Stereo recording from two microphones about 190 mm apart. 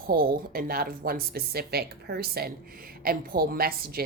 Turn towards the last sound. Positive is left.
turn(degrees=-50)  # may be behind; listen again after turning